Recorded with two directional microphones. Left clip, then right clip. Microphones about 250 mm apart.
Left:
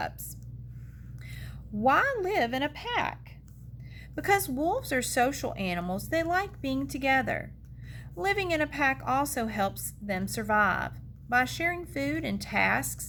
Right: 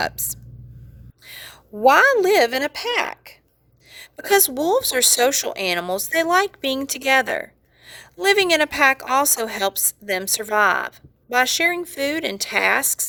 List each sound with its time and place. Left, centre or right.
0.0 s a woman's voice: right